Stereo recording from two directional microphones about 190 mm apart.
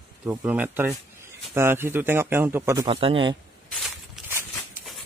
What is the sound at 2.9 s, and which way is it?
Speech, 30° right (ahead or behind).